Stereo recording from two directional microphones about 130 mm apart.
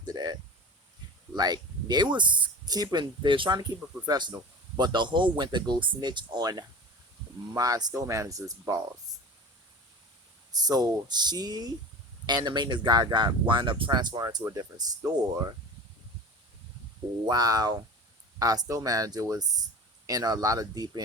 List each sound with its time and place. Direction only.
0.0 s speech: 30° right (ahead or behind)
1.4 s speech: 30° right (ahead or behind)
10.5 s speech: 30° right (ahead or behind)
17.2 s speech: 30° right (ahead or behind)